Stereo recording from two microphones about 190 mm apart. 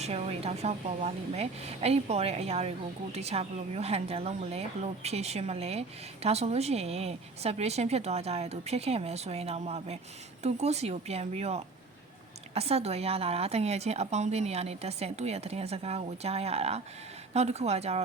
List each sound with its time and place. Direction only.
0.0 s a woman's voice: 35° right (ahead or behind)